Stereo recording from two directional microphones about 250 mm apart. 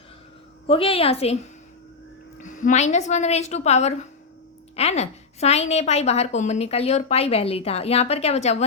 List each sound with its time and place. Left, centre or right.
0.7 s a woman's voice: left
2.4 s a woman's voice: left